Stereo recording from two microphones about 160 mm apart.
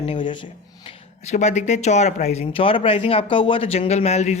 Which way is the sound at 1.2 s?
45° left (ahead or behind).